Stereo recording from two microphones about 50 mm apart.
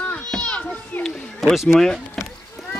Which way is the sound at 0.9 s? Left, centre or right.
Left.